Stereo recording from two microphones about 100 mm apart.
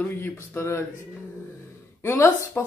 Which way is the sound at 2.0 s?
25° left (ahead or behind).